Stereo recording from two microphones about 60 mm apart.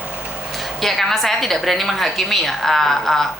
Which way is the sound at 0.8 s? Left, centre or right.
Centre.